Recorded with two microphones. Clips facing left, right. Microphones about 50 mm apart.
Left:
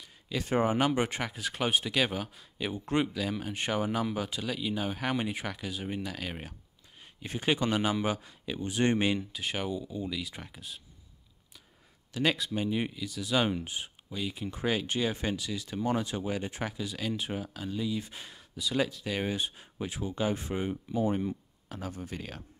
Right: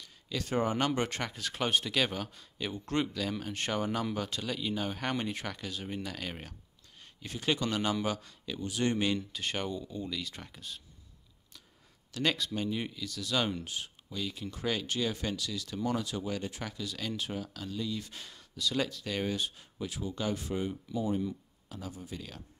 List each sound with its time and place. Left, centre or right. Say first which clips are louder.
0.0 s a sound: left 2 dB; centre
0.7 s speech: left 3 dB; centre
7.2 s speech: left 3 dB; left
9.1 s speech: left 1 dB; centre
12.1 s speech: left 2 dB; centre; by 22.4 s left